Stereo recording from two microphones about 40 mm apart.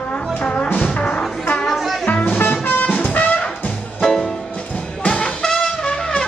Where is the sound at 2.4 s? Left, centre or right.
Left.